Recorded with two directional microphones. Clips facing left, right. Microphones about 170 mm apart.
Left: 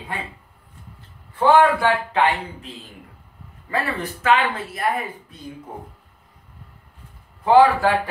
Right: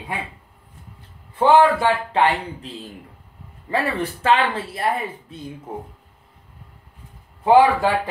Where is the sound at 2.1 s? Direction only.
35° right (ahead or behind).